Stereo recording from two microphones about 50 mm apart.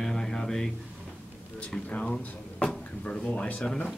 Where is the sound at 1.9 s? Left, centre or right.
Left.